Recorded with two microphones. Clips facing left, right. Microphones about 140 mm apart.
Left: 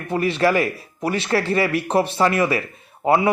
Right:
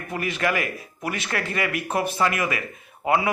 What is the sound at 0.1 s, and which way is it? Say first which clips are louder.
Speech: left 7 dB; 30° left (ahead or behind).